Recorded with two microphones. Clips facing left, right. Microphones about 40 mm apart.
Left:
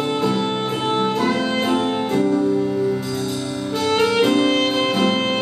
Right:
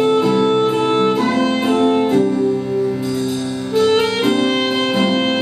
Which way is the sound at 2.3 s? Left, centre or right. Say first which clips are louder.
Right 1 dB; centre.